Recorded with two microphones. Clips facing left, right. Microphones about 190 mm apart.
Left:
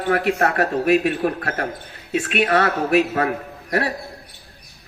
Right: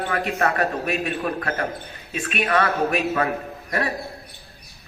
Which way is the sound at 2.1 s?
70° left (ahead or behind).